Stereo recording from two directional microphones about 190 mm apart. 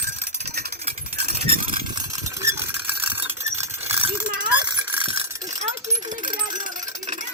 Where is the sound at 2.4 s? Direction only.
15° right (ahead or behind).